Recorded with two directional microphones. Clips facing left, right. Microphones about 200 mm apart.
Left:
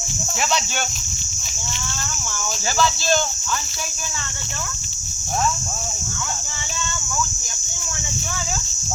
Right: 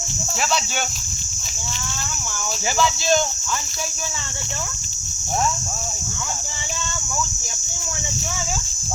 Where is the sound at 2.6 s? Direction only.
15° right (ahead or behind).